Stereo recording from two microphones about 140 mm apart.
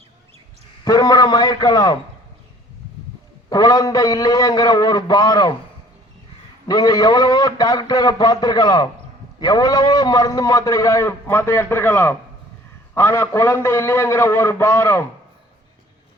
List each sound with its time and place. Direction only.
0.9 s a man's voice: 25° left (ahead or behind)
3.5 s a man's voice: 25° left (ahead or behind)
6.7 s a man's voice: 25° left (ahead or behind)